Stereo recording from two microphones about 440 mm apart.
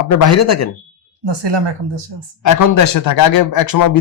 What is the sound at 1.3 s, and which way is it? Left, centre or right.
Speech, right.